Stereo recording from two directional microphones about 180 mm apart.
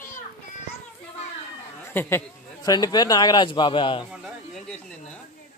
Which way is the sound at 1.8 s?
15° left (ahead or behind).